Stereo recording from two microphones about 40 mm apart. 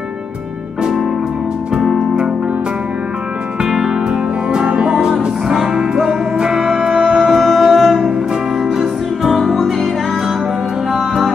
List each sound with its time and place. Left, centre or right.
3.6 s music: centre
7.2 s music: centre
10.9 s music: centre